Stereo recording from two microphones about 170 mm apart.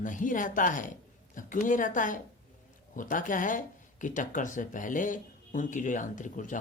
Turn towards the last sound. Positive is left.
turn(degrees=50)  # may be behind; listen again after turning